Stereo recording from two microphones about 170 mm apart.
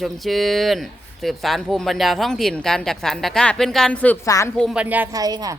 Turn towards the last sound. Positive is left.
turn(degrees=-20)  # may be behind; listen again after turning